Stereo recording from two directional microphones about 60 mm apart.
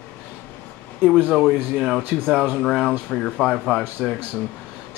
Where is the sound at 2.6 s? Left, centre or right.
Centre.